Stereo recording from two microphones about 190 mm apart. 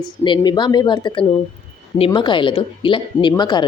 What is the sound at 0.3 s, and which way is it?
Speech, 25° left (ahead or behind).